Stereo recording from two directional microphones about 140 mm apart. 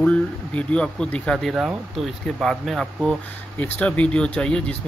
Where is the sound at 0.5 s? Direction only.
5° left (ahead or behind).